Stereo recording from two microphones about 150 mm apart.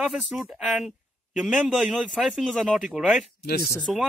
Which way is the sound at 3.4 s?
90° left.